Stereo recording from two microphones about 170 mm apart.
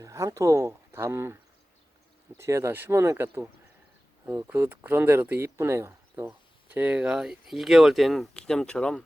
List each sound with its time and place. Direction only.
0.0 s speech: 20° right (ahead or behind)
2.4 s speech: 15° right (ahead or behind); by 9.0 s 5° left (ahead or behind)